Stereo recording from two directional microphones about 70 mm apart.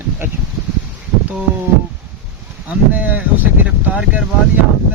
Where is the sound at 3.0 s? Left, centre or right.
Right.